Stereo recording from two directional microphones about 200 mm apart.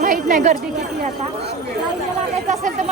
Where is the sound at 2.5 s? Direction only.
35° right (ahead or behind).